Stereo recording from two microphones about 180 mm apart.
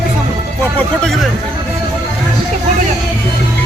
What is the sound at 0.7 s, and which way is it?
Music, 5° left (ahead or behind).